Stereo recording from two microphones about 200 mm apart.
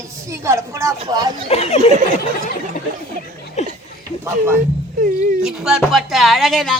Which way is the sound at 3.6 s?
35° left (ahead or behind).